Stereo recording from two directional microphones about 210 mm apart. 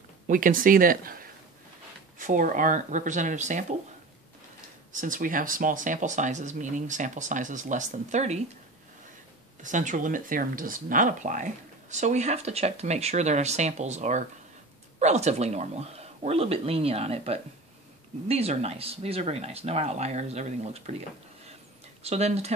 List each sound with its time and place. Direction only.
0.3 s speech: 40° right (ahead or behind)
4.9 s speech: 40° right (ahead or behind)
9.6 s speech: 35° right (ahead or behind)
22.0 s speech: 30° right (ahead or behind)